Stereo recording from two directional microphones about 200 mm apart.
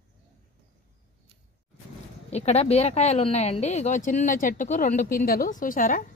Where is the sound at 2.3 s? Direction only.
30° left (ahead or behind).